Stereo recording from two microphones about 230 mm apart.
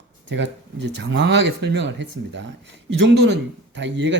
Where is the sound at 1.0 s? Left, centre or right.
Right.